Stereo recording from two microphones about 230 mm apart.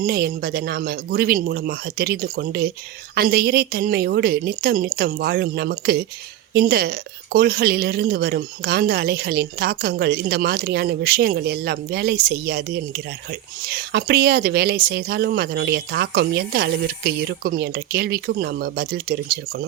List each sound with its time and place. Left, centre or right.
0.0 s a woman's voice: right